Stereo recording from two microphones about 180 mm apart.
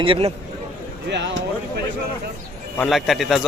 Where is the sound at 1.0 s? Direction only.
70° right (ahead or behind).